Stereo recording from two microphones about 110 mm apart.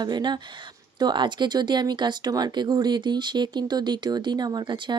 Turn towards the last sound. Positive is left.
turn(degrees=-45)  # may be behind; listen again after turning